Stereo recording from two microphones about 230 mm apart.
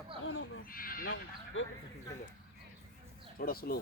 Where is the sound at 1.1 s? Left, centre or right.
Left.